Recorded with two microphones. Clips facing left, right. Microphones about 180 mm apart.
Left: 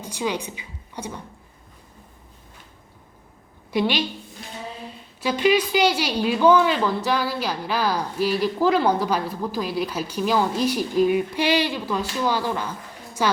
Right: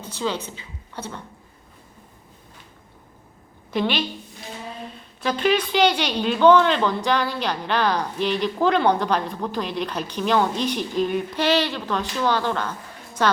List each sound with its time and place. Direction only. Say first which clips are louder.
0.0 s a woman's voice: even; 10° left (ahead or behind)
3.7 s a woman's voice: left 1 dB; 10° left (ahead or behind)
5.2 s speech: left 2 dB; 10° left (ahead or behind)